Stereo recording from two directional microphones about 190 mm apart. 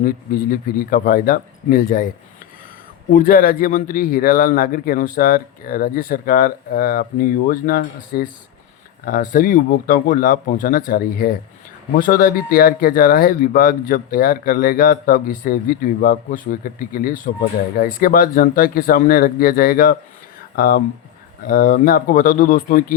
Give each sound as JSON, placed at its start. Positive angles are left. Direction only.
{"t": 0.0, "sound": "speech", "side_deg": 50}